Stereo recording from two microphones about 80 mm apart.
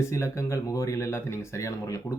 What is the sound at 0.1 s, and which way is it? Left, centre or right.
Speech, left.